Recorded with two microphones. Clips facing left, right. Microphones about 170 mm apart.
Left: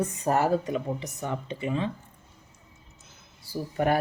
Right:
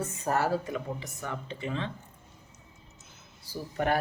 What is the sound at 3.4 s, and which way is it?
Speech, 10° left (ahead or behind).